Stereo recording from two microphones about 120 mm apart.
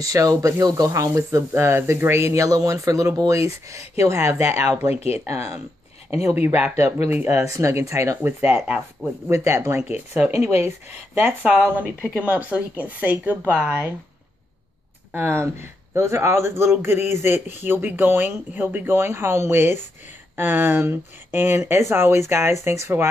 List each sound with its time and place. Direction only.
0.0 s speech: 30° right (ahead or behind)
4.6 s speech: 55° left (ahead or behind)
5.2 s speech: 25° right (ahead or behind)
6.2 s a woman's voice: 15° right (ahead or behind)
8.5 s speech: 5° right (ahead or behind)
9.3 s speech: 25° right (ahead or behind)
9.8 s a woman's voice: 10° right (ahead or behind)
15.1 s a woman's voice: 20° right (ahead or behind)